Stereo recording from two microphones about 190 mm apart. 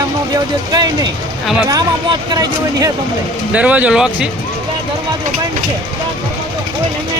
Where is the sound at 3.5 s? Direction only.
5° right (ahead or behind).